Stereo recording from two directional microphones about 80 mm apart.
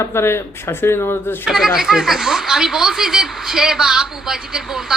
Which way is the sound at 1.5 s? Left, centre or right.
Centre.